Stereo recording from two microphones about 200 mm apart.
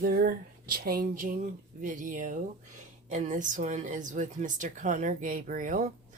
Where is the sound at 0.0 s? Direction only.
45° right (ahead or behind).